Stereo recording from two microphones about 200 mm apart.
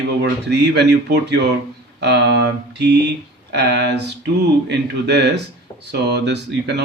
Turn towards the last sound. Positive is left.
turn(degrees=-60)  # may be behind; listen again after turning